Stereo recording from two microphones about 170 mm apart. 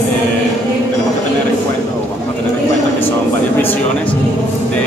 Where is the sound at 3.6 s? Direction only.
10° left (ahead or behind).